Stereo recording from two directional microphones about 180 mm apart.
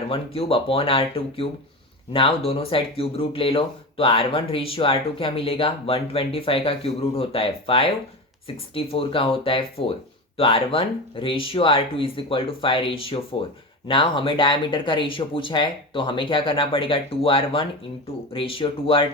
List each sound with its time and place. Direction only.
0.1 s speech: 30° left (ahead or behind)